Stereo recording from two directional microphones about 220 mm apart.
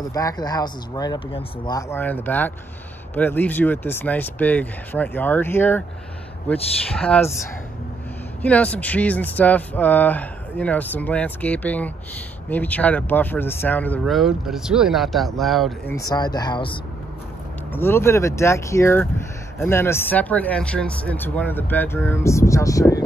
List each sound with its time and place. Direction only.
0.1 s speech: 15° left (ahead or behind)
8.4 s speech: 5° left (ahead or behind)
15.9 s speech: 15° left (ahead or behind)
17.7 s speech: 10° left (ahead or behind)